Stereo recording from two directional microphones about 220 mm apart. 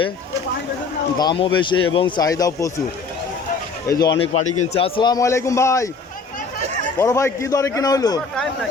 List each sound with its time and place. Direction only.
1.2 s speech: 20° left (ahead or behind)
3.8 s a man's voice: 15° left (ahead or behind)
4.4 s a man's voice: 30° left (ahead or behind); by 5.9 s 15° left (ahead or behind)
7.0 s a man's voice: 15° left (ahead or behind)